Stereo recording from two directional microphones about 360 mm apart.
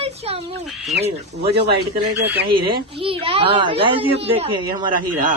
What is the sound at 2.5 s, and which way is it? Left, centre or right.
Speech, centre.